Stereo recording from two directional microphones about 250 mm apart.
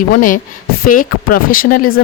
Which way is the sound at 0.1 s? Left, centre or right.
Left.